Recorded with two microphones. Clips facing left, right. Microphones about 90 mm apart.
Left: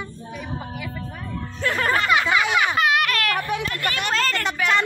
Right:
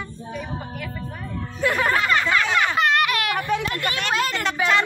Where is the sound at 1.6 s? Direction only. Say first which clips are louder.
Right 1 dB; 5° right (ahead or behind).